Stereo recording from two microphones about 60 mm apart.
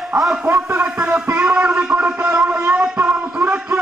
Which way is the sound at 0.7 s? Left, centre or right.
Right.